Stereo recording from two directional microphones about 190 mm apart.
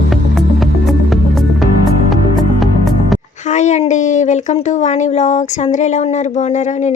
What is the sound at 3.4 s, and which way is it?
Speech, 40° left (ahead or behind).